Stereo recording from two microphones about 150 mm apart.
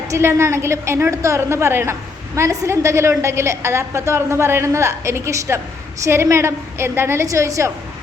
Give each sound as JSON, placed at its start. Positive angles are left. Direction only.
{"t": 0.1, "sound": "a woman's voice", "side_deg": -15}